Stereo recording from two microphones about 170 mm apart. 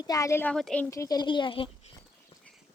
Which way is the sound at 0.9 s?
20° left (ahead or behind).